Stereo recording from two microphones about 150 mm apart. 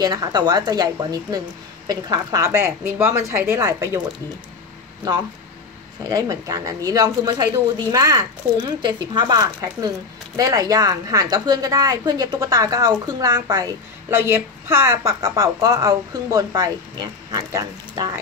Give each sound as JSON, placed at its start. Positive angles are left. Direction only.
{"t": 0.0, "sound": "speech", "side_deg": -25}
{"t": 6.0, "sound": "speech", "side_deg": -25}